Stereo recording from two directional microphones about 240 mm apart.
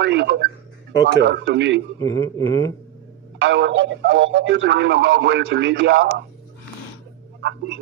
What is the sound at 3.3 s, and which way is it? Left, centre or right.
Speech, right.